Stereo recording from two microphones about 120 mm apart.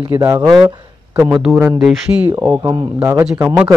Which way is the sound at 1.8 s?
5° right (ahead or behind).